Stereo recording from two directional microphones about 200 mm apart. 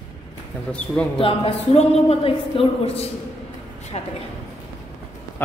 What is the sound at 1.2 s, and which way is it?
A man's voice, 30° left (ahead or behind).